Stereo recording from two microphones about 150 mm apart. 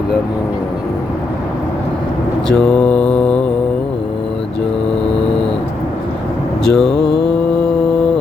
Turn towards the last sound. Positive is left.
turn(degrees=90)